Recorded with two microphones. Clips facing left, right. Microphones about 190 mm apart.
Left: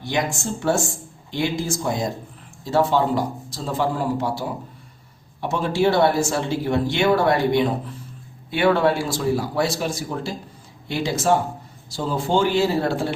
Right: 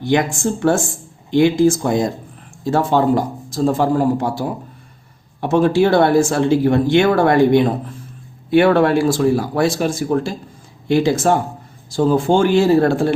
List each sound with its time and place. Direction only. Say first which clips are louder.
1.3 s speech: right 12 dB; 55° right (ahead or behind)